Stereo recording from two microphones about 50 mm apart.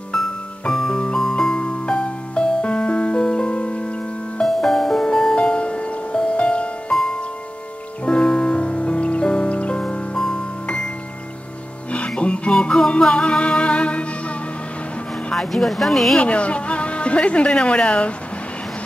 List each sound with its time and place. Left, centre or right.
0.1 s music: centre; by 4.0 s left
4.4 s music: centre
8.0 s music: centre
10.1 s music: centre
12.2 s music: left
15.3 s speech: centre
16.2 s speech: left